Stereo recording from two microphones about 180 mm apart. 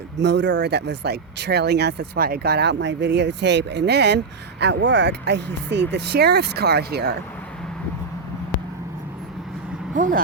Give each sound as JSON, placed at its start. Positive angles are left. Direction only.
{"t": 0.2, "sound": "speech", "side_deg": -75}
{"t": 9.9, "sound": "speech", "side_deg": -45}